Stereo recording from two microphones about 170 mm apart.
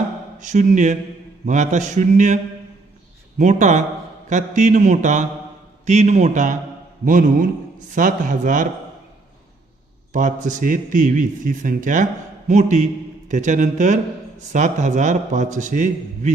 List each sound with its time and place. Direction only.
0.4 s a man's voice: 45° right (ahead or behind)
10.1 s a man's voice: 50° right (ahead or behind)